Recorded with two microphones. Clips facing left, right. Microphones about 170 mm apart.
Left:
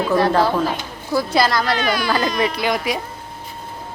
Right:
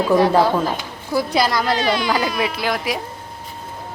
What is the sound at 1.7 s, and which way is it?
Speech, 30° right (ahead or behind).